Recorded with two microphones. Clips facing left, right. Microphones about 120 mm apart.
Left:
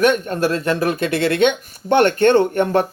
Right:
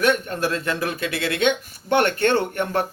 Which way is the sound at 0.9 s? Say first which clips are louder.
Left 7 dB; 50° left (ahead or behind).